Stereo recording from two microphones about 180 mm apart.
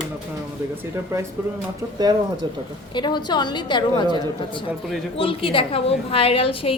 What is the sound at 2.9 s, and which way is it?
A woman's voice, 25° left (ahead or behind).